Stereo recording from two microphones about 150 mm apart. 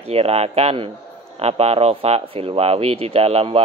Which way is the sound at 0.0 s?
45° right (ahead or behind).